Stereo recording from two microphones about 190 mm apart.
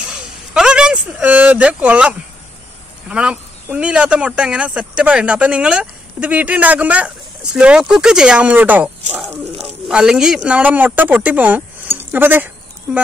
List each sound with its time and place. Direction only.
0.6 s speech: 5° right (ahead or behind)